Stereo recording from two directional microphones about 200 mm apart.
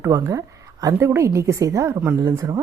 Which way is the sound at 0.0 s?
15° right (ahead or behind).